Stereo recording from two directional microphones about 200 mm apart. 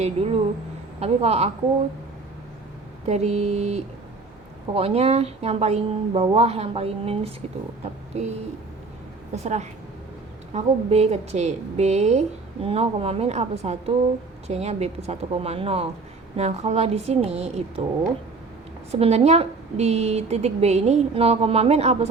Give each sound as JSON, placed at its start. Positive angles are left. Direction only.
{"t": 0.0, "sound": "a woman's voice", "side_deg": -30}
{"t": 3.1, "sound": "a woman's voice", "side_deg": -35}
{"t": 9.3, "sound": "a woman's voice", "side_deg": -35}
{"t": 18.9, "sound": "a woman's voice", "side_deg": -30}